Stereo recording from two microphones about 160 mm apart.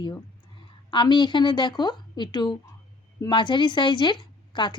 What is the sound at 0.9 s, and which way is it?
Speech, 30° left (ahead or behind).